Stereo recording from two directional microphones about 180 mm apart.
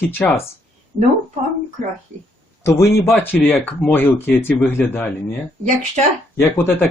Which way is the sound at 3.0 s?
10° left (ahead or behind).